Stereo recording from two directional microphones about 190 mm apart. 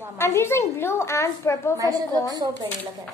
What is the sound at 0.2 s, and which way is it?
A woman's voice, 15° left (ahead or behind).